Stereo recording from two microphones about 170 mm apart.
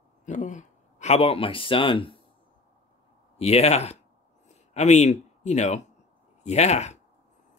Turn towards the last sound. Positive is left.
turn(degrees=40)  # may be behind; listen again after turning